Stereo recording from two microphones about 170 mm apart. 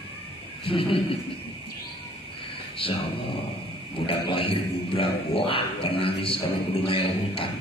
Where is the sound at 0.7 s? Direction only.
30° left (ahead or behind).